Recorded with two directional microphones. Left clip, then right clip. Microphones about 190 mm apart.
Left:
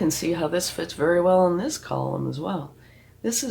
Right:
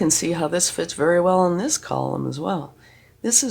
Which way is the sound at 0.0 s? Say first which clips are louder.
Right 3 dB; 50° right (ahead or behind).